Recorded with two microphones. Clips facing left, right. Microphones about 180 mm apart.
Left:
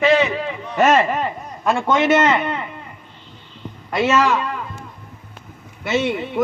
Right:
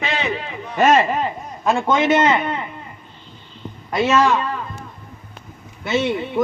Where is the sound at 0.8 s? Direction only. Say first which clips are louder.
Even; 30° right (ahead or behind).